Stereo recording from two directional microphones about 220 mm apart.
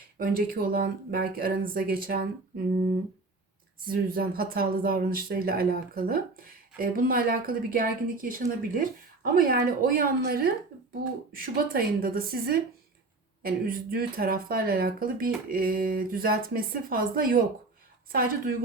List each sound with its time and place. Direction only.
0.2 s speech: 40° right (ahead or behind)
3.8 s a woman's voice: 40° right (ahead or behind)